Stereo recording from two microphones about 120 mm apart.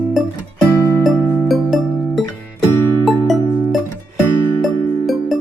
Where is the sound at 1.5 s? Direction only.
Centre (ahead or behind).